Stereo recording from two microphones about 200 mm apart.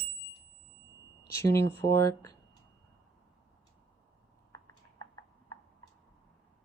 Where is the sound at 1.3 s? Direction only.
15° left (ahead or behind).